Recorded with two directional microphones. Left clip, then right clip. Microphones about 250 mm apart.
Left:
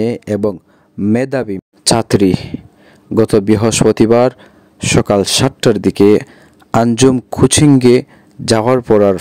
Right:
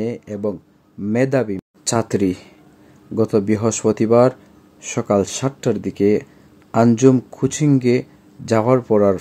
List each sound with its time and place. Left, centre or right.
0.0 s speech: left